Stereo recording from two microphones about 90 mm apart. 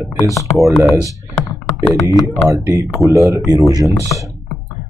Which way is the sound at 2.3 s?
35° right (ahead or behind).